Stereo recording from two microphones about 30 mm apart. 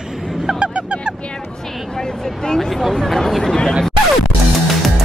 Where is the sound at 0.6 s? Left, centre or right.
Right.